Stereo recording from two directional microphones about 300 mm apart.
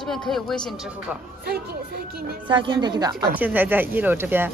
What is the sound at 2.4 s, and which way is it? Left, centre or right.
Speech, centre.